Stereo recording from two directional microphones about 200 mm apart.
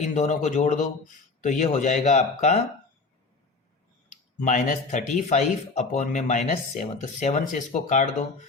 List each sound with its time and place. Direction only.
0.0 s speech: 35° left (ahead or behind)
4.4 s speech: 40° left (ahead or behind)